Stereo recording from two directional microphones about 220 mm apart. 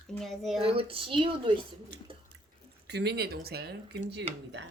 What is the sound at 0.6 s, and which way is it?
Speech, 25° right (ahead or behind).